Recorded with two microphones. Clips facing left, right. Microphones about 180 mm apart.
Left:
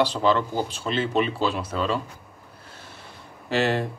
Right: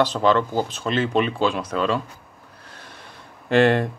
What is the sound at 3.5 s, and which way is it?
Speech, 55° right (ahead or behind).